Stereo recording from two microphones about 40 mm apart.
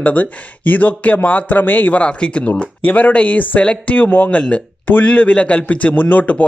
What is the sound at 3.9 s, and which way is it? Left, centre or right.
A man's voice, left.